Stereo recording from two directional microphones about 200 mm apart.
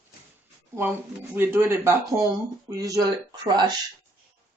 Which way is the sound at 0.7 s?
10° right (ahead or behind).